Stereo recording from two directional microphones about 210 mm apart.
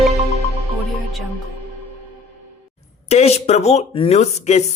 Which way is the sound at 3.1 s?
30° left (ahead or behind).